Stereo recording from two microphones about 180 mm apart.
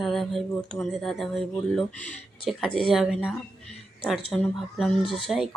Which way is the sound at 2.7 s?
30° left (ahead or behind).